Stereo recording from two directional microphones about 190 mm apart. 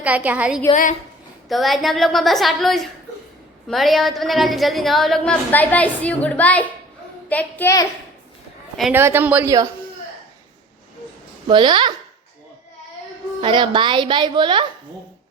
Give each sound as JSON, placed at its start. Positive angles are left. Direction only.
{"t": 0.0, "sound": "a woman's voice", "side_deg": -10}
{"t": 0.7, "sound": "a woman's voice", "side_deg": 40}
{"t": 1.5, "sound": "a woman's voice", "side_deg": 0}
{"t": 8.8, "sound": "a woman's voice", "side_deg": -10}
{"t": 11.4, "sound": "a woman's voice", "side_deg": -25}
{"t": 13.4, "sound": "a woman's voice", "side_deg": -25}